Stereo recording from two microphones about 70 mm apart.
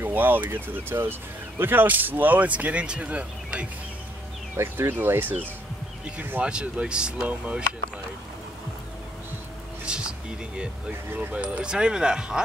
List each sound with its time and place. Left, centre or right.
0.0 s speech: right
4.6 s speech: right
6.4 s speech: centre
9.8 s a sound: centre
11.1 s speech: centre